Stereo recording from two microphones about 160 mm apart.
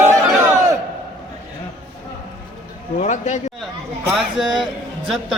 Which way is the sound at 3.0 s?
45° left (ahead or behind).